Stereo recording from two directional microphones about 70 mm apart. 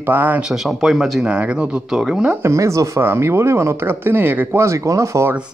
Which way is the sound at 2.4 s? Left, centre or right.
Right.